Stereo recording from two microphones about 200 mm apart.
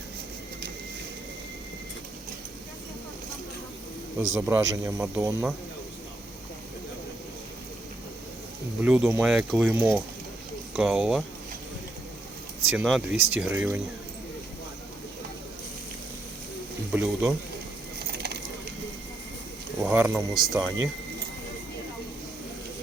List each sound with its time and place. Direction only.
4.2 s speech: 10° right (ahead or behind)
8.8 s speech: 5° right (ahead or behind)
12.7 s speech: 5° right (ahead or behind)
16.9 s speech: 10° right (ahead or behind)
18.0 s a sound: 55° right (ahead or behind)
19.8 s speech: 10° right (ahead or behind)